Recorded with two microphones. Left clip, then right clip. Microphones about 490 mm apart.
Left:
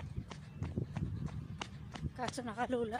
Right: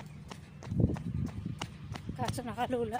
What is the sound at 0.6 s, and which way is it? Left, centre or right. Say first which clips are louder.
Horse: right 3 dB; left.